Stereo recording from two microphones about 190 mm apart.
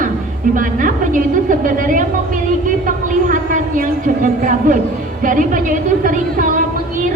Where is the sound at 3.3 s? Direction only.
45° right (ahead or behind).